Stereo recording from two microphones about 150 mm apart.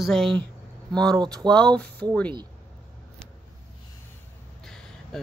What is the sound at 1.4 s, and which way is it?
Speech, 5° left (ahead or behind).